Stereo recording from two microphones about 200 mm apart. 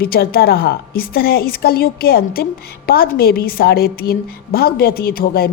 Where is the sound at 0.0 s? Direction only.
50° left (ahead or behind).